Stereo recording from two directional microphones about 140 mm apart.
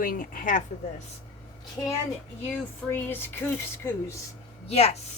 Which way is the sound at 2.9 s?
15° left (ahead or behind).